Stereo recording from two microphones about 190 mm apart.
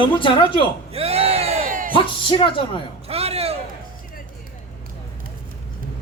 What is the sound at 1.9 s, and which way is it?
Speech, 25° left (ahead or behind).